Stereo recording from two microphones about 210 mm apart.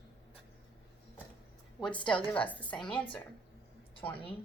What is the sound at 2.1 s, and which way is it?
Speech, 5° left (ahead or behind).